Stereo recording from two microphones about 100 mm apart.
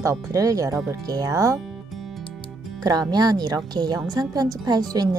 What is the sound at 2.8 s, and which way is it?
Speech, 40° right (ahead or behind).